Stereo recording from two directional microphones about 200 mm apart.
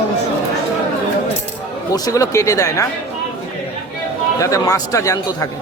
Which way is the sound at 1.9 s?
15° left (ahead or behind).